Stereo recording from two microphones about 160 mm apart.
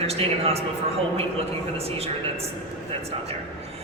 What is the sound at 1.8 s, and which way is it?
Speech, 40° right (ahead or behind).